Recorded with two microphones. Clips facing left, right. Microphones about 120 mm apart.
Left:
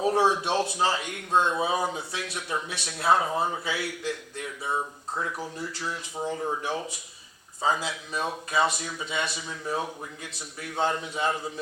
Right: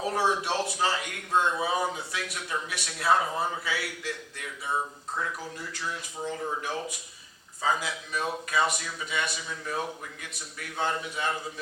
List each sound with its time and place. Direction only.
0.0 s a man's voice: 25° left (ahead or behind)